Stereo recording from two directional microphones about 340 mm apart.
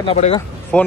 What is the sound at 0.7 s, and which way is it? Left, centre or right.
Speech, centre.